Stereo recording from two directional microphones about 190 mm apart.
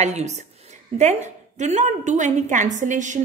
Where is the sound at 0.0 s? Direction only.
35° right (ahead or behind).